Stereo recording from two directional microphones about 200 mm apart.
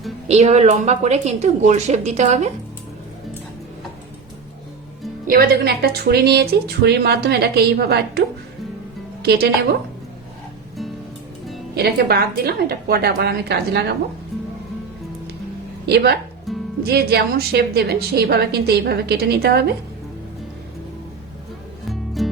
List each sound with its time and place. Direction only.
0.3 s a woman's voice: 35° right (ahead or behind)
5.3 s a woman's voice: 50° right (ahead or behind)
9.2 s a woman's voice: 55° right (ahead or behind)
11.8 s a woman's voice: 55° right (ahead or behind)
14.3 s music: centre (ahead or behind)
15.9 s a woman's voice: 50° right (ahead or behind)
16.5 s music: centre (ahead or behind)
16.8 s a woman's voice: 55° right (ahead or behind)
21.8 s music: centre (ahead or behind)